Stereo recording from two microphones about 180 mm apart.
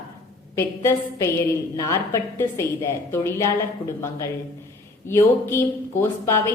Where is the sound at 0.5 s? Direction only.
15° left (ahead or behind).